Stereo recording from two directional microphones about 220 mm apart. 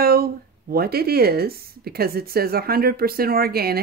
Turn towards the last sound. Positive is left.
turn(degrees=-45)  # may be behind; listen again after turning